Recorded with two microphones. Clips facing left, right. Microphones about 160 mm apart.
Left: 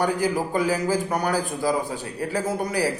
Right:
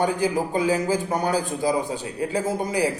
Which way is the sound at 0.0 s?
20° right (ahead or behind).